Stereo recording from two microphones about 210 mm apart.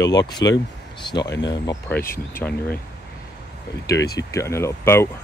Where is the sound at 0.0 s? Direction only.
20° left (ahead or behind).